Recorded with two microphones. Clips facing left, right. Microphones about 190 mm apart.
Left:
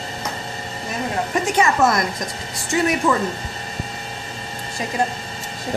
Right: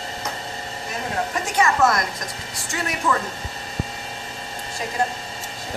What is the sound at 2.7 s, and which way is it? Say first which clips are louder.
Speech: left 9 dB; 20° left (ahead or behind).